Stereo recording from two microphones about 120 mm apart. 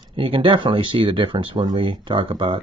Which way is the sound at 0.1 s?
45° right (ahead or behind).